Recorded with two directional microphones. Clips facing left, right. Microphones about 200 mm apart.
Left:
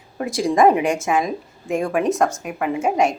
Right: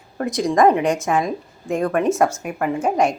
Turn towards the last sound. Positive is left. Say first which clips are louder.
# even
turn(degrees=0)  # may be behind; listen again after turning